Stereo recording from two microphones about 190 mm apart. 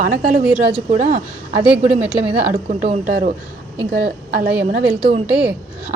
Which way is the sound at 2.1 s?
30° right (ahead or behind).